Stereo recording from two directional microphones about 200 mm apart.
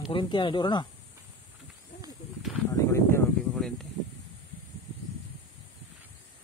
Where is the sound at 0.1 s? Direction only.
25° left (ahead or behind).